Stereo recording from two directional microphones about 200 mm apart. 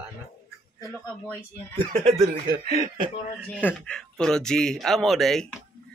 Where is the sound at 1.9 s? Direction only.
30° right (ahead or behind).